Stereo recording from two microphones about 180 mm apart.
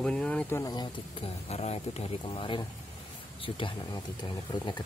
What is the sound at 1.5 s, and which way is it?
Speech, 35° left (ahead or behind).